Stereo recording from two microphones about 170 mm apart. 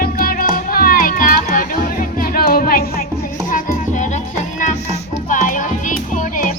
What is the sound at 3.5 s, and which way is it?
Music, 50° left (ahead or behind).